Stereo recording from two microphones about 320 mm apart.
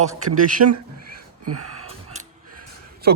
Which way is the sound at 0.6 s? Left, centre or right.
Right.